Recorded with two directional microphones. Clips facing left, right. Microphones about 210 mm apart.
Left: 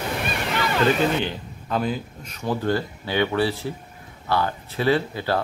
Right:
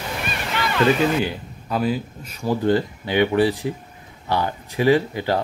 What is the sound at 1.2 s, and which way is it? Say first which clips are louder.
Speech: right 3 dB; 5° right (ahead or behind).